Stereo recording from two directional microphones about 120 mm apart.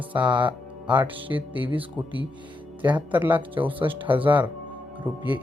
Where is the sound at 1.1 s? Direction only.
50° right (ahead or behind).